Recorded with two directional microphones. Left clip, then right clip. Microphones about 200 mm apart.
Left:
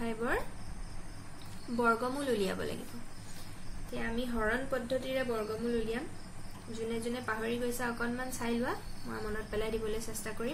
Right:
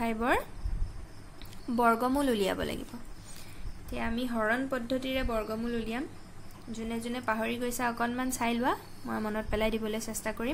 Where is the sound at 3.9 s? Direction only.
55° right (ahead or behind).